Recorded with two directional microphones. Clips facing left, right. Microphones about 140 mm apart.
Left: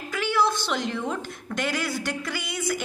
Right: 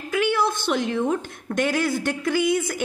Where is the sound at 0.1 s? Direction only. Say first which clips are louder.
Right 2 dB; 55° right (ahead or behind).